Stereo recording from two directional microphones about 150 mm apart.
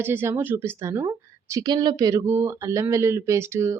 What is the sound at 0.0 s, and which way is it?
Speech, 15° right (ahead or behind).